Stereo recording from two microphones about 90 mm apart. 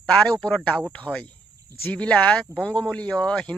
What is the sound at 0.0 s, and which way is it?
Speech, 10° left (ahead or behind).